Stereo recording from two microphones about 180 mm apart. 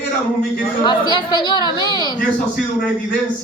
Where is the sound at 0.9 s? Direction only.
25° left (ahead or behind).